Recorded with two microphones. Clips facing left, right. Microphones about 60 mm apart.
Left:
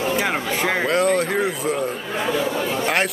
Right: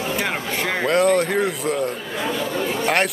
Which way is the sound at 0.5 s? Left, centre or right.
Centre.